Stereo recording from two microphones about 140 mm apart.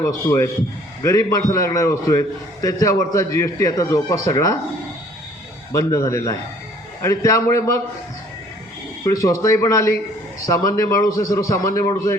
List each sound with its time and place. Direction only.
0.0 s a man's voice: 20° left (ahead or behind)
5.7 s a man's voice: 20° left (ahead or behind)
9.0 s a man's voice: 20° left (ahead or behind)